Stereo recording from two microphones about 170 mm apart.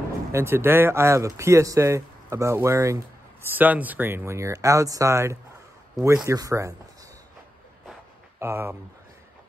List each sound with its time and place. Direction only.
0.3 s speech: 15° right (ahead or behind)
8.4 s speech: 15° right (ahead or behind)